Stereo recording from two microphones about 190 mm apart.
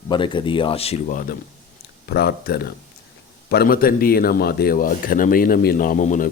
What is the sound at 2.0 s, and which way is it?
Speech, 55° left (ahead or behind).